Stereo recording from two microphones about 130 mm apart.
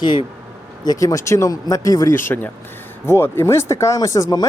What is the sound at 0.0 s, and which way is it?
Speech, 35° left (ahead or behind).